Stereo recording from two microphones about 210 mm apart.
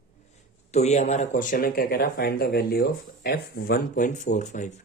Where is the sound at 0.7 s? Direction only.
30° left (ahead or behind).